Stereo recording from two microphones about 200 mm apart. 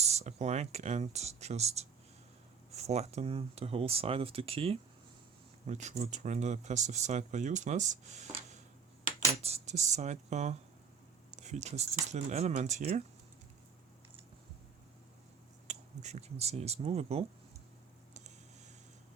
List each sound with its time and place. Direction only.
0.0 s speech: 35° right (ahead or behind)
9.3 s speech: 30° right (ahead or behind)
15.6 s speech: 35° right (ahead or behind)